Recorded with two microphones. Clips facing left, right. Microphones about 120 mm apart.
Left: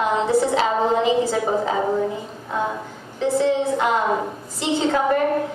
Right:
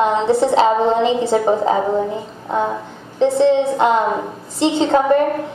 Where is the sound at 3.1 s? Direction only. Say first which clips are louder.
Right 6 dB; 25° right (ahead or behind).